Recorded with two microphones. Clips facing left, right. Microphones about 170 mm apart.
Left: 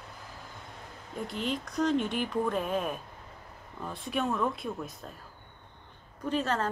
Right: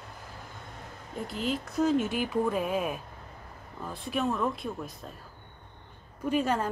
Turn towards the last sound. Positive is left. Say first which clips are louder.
# right 2 dB
turn(degrees=-10)  # may be behind; listen again after turning